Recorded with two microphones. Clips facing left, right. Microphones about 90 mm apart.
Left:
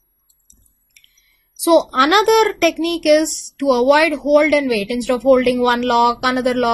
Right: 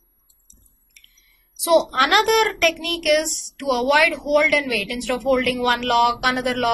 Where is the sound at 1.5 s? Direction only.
20° left (ahead or behind).